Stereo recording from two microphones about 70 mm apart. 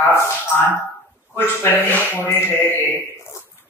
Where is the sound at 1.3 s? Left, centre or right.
Left.